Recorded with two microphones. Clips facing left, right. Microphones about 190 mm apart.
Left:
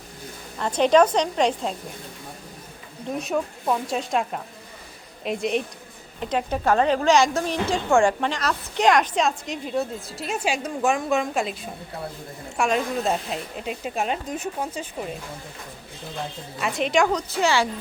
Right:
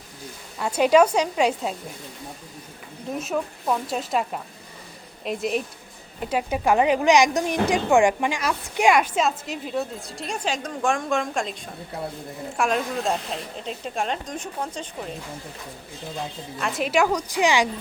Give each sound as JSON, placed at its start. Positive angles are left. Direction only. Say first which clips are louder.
{"t": 0.6, "sound": "a woman's voice", "louder": "even", "side_deg": -10}
{"t": 3.2, "sound": "a woman's voice", "louder": "left 1 dB", "side_deg": 0}
{"t": 16.6, "sound": "a woman's voice", "louder": "left 1 dB", "side_deg": 0}